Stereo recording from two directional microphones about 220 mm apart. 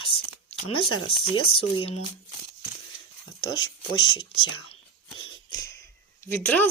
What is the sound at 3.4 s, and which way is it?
Speech, 65° left (ahead or behind).